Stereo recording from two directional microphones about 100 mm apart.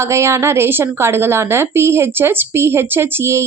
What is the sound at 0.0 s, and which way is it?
A woman's voice, 25° right (ahead or behind).